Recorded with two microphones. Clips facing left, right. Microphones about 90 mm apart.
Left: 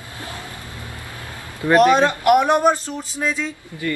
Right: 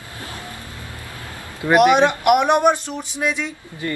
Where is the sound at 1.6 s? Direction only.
10° right (ahead or behind).